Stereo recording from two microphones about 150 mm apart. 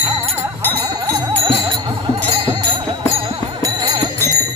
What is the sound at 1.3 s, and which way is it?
Music, 35° right (ahead or behind).